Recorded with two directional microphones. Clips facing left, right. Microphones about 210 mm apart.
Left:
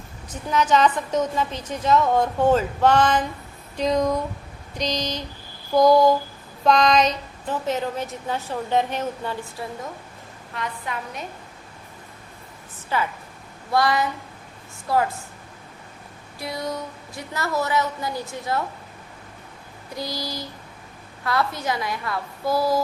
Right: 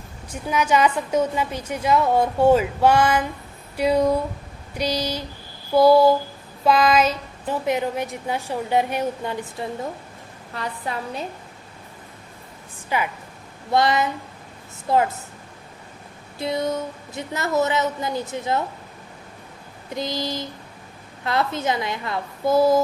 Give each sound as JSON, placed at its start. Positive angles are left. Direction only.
{"t": 0.3, "sound": "a woman's voice", "side_deg": -10}
{"t": 10.5, "sound": "a woman's voice", "side_deg": -35}
{"t": 12.9, "sound": "a woman's voice", "side_deg": -15}
{"t": 16.4, "sound": "a woman's voice", "side_deg": -25}
{"t": 19.9, "sound": "a woman's voice", "side_deg": -20}